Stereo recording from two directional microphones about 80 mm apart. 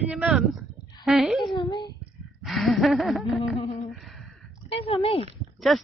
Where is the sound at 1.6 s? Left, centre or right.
Left.